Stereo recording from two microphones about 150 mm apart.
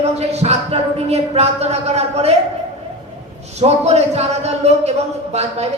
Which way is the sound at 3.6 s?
45° right (ahead or behind).